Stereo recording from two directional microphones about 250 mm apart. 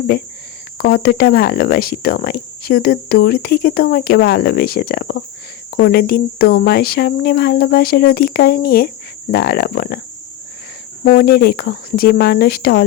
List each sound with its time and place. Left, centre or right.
0.8 s speech: left
11.0 s speech: left